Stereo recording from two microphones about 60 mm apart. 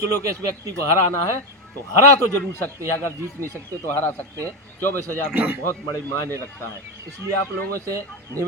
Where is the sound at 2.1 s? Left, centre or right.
Left.